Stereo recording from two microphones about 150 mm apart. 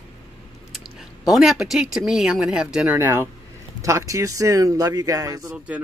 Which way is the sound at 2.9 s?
15° right (ahead or behind).